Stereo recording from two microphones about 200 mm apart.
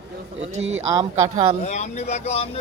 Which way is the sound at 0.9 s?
20° right (ahead or behind).